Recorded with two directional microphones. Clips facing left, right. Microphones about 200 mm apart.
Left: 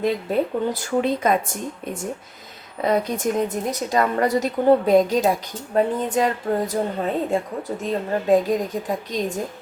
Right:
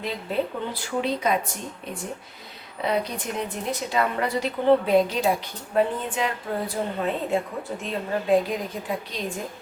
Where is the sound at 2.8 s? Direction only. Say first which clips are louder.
Left 5 dB; 45° left (ahead or behind).